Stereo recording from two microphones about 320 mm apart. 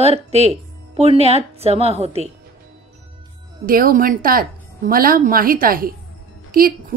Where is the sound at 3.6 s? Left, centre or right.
Right.